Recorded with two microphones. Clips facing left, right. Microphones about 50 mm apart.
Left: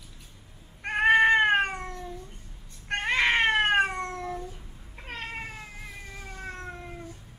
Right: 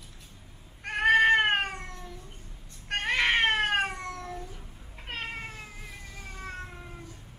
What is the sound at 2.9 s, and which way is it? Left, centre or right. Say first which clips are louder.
Cat: left 1 dB; left.